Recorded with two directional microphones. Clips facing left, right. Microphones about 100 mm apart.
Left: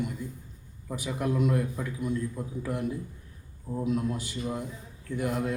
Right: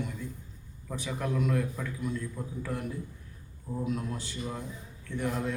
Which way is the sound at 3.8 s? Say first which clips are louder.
Left 6 dB; 20° left (ahead or behind).